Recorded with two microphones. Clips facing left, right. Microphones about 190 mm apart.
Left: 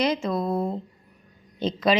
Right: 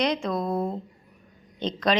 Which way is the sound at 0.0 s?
5° left (ahead or behind).